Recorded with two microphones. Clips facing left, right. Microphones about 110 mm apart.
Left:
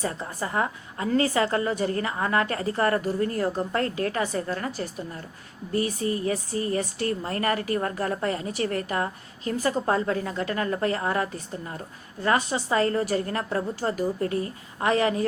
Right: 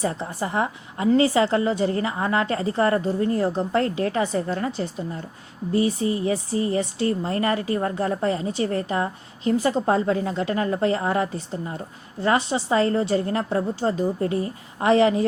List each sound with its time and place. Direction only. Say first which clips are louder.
0.0 s a woman's voice: right 4 dB; 30° right (ahead or behind)